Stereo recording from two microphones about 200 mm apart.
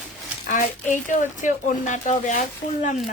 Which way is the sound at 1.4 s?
40° left (ahead or behind).